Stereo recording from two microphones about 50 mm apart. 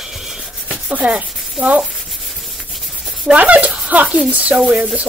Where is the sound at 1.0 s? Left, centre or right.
Centre.